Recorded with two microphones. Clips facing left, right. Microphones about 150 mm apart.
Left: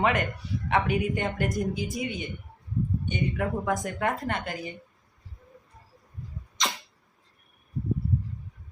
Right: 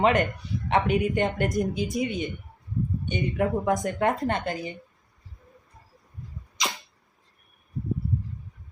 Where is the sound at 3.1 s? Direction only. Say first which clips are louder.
Right 5 dB; 20° right (ahead or behind).